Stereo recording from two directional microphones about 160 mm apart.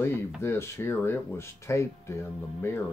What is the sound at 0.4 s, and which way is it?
Speech, 15° left (ahead or behind).